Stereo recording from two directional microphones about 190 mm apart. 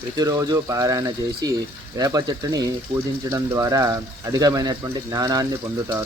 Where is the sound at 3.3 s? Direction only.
15° right (ahead or behind).